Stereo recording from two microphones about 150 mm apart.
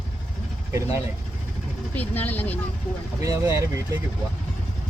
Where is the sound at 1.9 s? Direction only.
10° left (ahead or behind).